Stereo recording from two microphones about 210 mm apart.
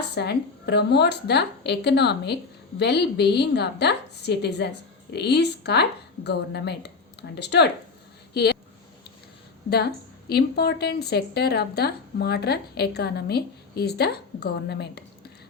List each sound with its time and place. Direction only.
0.1 s a woman's voice: 55° left (ahead or behind)
8.3 s a sound: 50° left (ahead or behind)
9.6 s a woman's voice: 50° left (ahead or behind)